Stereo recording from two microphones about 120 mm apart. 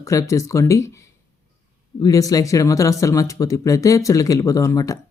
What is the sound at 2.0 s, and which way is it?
Speech, 30° left (ahead or behind).